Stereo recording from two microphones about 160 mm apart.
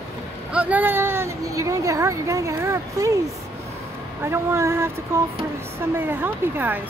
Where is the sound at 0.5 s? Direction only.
10° right (ahead or behind).